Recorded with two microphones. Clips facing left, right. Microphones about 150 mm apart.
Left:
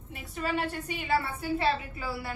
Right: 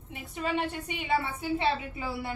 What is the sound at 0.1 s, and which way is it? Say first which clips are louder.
A woman's voice: right 1 dB; 20° right (ahead or behind).